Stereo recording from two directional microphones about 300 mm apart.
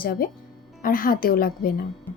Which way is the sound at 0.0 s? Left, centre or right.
Left.